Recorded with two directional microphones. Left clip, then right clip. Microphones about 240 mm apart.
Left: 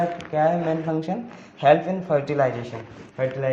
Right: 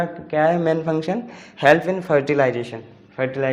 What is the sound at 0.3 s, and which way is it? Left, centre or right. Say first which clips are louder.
Speech: right 5 dB; right.